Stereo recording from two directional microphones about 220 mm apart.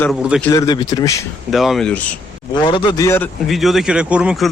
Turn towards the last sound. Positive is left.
turn(degrees=-5)  # may be behind; listen again after turning